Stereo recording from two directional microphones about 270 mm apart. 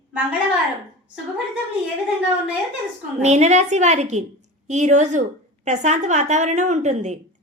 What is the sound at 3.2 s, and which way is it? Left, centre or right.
A woman's voice, right.